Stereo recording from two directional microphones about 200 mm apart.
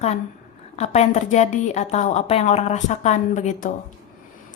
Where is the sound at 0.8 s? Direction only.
35° left (ahead or behind).